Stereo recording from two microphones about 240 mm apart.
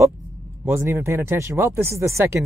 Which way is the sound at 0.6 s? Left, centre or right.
Centre.